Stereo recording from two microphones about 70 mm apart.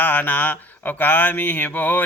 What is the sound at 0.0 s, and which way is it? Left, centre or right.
Speech, left.